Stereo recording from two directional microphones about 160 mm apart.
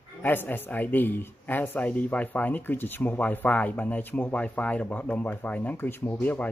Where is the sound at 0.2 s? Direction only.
10° left (ahead or behind).